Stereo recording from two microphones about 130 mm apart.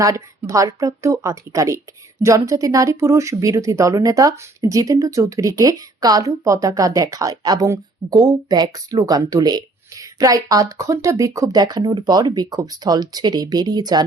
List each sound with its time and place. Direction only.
0.0 s speech: 25° right (ahead or behind)